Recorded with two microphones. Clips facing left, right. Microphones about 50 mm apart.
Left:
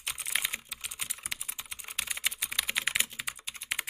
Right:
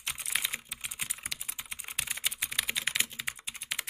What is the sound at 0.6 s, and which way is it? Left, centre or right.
Typing, right.